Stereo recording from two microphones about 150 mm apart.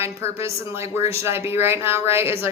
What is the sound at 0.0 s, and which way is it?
Speech, 15° right (ahead or behind).